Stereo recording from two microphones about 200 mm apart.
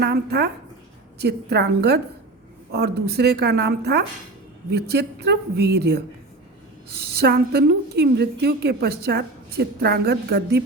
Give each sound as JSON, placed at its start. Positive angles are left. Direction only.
{"t": 0.0, "sound": "a woman's voice", "side_deg": -55}
{"t": 7.0, "sound": "a woman's voice", "side_deg": -55}